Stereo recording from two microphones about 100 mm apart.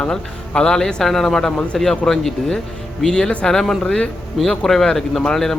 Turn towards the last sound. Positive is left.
turn(degrees=5)  # may be behind; listen again after turning